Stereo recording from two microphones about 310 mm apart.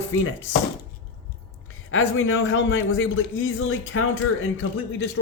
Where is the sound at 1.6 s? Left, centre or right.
Left.